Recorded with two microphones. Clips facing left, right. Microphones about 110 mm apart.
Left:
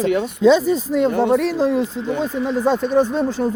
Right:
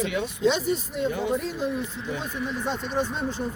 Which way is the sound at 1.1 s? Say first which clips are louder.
Left 8 dB; 65° left (ahead or behind).